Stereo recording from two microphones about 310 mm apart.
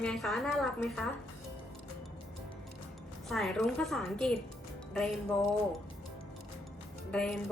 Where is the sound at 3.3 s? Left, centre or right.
Centre.